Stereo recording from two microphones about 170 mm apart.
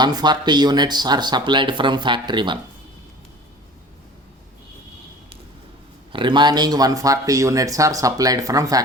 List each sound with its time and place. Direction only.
0.0 s speech: 25° right (ahead or behind)
6.1 s speech: 30° right (ahead or behind)